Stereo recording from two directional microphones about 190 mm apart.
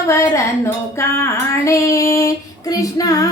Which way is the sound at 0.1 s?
15° left (ahead or behind).